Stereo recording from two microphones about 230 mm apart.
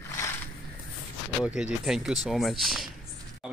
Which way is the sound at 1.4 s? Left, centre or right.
Centre.